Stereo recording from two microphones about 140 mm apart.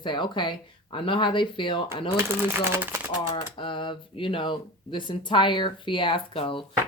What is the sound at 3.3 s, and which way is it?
Speech, 35° left (ahead or behind).